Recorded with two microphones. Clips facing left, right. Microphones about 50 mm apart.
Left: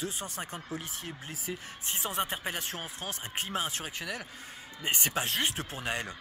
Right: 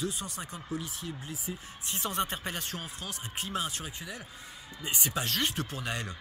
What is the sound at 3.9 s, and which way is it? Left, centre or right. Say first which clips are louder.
Speech: left 4 dB; left.